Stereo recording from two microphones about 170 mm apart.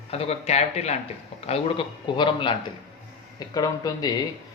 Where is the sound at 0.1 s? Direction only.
35° left (ahead or behind).